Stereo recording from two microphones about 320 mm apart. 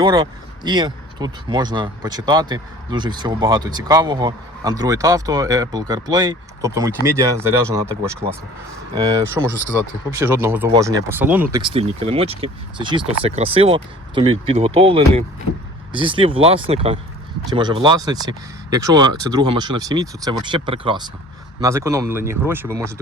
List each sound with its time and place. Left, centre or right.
0.0 s speech: centre
11.5 s speech: centre